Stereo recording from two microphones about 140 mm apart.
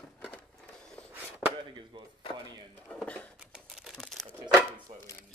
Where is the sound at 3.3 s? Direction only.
5° right (ahead or behind).